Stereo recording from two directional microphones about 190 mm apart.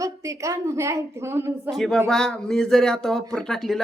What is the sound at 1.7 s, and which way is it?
Speech, centre (ahead or behind).